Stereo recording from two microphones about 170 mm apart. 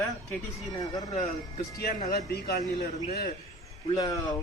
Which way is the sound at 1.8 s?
65° left (ahead or behind).